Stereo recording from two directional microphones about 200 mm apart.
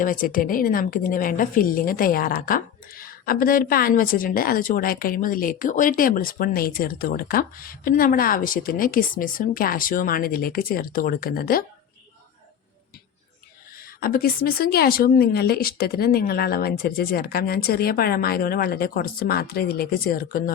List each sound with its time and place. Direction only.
0.0 s a woman's voice: 45° left (ahead or behind)
13.7 s a woman's voice: 45° left (ahead or behind)